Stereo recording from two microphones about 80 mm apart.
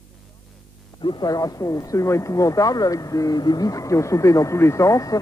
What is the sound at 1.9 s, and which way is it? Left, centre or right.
Speech, left.